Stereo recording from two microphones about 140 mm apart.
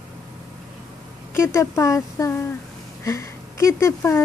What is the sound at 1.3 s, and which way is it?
Speech, 20° left (ahead or behind).